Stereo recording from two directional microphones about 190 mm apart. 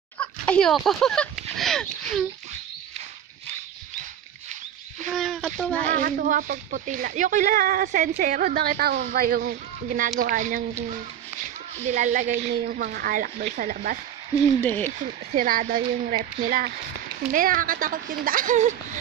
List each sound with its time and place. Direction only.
0.2 s a sound: 5° left (ahead or behind)
5.1 s speech: centre (ahead or behind)
5.9 s speech: 45° right (ahead or behind)
10.9 s a sound: 45° right (ahead or behind)
12.6 s speech: 50° right (ahead or behind)
14.6 s speech: 10° left (ahead or behind)
15.3 s speech: 50° right (ahead or behind)